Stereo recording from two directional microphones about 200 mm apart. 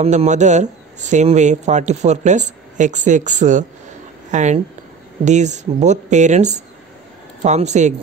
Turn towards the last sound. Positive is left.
turn(degrees=-35)  # may be behind; listen again after turning